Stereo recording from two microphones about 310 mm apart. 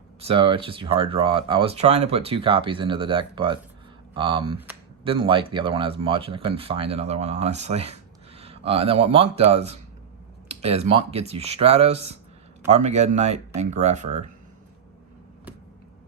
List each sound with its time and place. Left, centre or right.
0.2 s speech: centre